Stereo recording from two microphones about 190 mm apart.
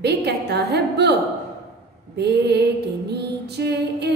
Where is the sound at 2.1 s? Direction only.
60° right (ahead or behind).